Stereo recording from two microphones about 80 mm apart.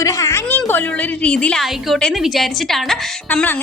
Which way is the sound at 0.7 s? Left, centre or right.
Centre.